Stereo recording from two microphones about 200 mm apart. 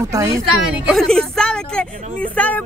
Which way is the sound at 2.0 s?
40° right (ahead or behind).